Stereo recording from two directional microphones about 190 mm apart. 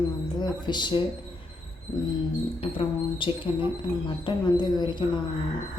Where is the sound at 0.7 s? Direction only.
25° left (ahead or behind).